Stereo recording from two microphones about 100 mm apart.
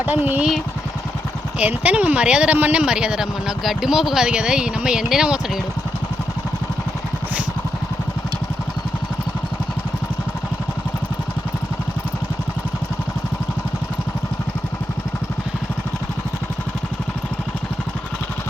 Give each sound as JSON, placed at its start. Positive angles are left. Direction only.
{"t": 0.0, "sound": "speech", "side_deg": -20}
{"t": 1.5, "sound": "speech", "side_deg": -15}